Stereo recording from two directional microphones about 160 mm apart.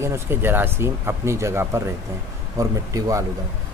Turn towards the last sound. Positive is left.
turn(degrees=-20)  # may be behind; listen again after turning